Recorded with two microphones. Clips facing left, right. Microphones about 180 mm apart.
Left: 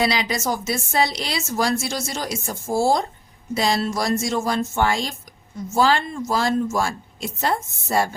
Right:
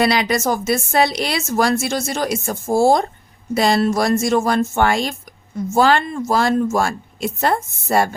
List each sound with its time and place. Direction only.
0.0 s a woman's voice: 60° right (ahead or behind)